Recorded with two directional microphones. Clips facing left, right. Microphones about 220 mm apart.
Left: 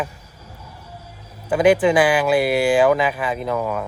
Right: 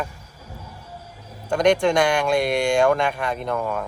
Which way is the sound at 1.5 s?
5° left (ahead or behind).